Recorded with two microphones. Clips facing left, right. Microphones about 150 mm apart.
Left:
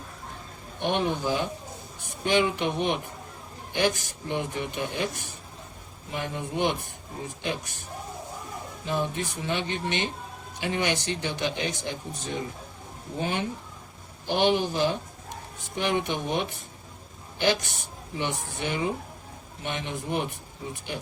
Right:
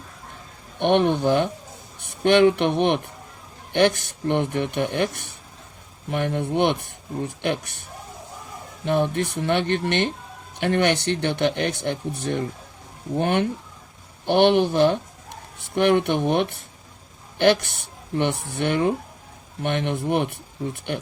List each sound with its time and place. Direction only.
0.8 s speech: 65° right (ahead or behind)
8.8 s a woman's voice: 65° right (ahead or behind)